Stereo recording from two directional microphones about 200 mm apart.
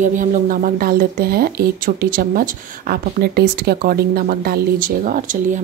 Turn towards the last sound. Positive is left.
turn(degrees=-40)  # may be behind; listen again after turning